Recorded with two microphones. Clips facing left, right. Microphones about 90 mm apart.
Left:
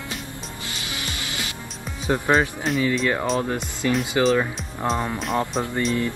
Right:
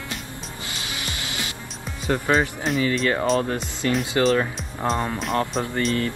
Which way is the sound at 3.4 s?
10° left (ahead or behind).